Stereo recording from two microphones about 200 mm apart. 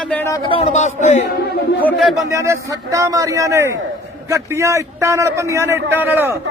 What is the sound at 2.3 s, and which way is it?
A man's voice, 15° right (ahead or behind).